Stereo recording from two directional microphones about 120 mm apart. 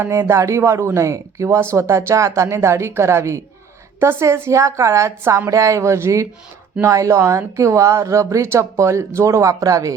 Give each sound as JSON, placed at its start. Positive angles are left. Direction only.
{"t": 0.0, "sound": "speech", "side_deg": -20}